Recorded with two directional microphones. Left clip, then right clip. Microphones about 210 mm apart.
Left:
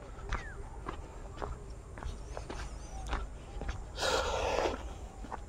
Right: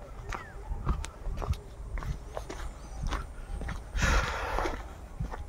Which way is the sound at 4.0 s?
40° left (ahead or behind).